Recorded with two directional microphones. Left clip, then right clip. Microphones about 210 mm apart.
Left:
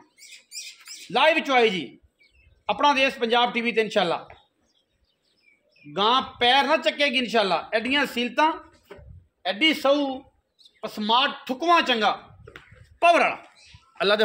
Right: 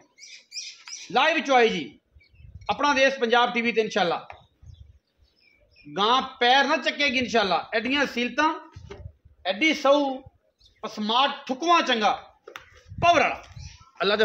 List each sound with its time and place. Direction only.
1.1 s a man's voice: 55° left (ahead or behind)
5.9 s a man's voice: 55° left (ahead or behind)